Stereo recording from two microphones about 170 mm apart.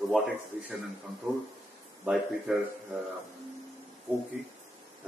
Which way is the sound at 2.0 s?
5° right (ahead or behind).